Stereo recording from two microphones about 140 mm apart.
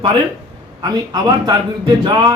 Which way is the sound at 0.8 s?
30° right (ahead or behind).